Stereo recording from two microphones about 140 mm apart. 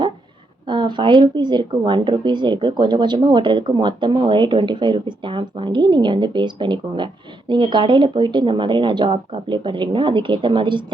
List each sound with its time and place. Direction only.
0.7 s speech: 35° right (ahead or behind)